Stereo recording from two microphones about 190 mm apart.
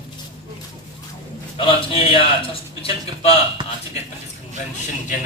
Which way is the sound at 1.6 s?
30° left (ahead or behind).